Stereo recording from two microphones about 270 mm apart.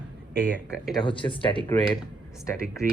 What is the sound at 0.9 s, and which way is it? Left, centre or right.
Speech, centre.